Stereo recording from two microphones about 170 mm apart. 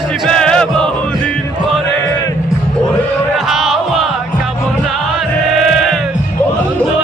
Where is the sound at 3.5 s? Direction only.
Centre (ahead or behind).